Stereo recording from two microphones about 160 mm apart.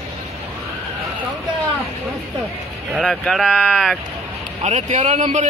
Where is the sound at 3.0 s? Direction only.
Centre (ahead or behind).